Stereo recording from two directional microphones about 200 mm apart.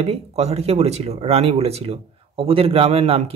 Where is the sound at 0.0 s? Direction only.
30° right (ahead or behind).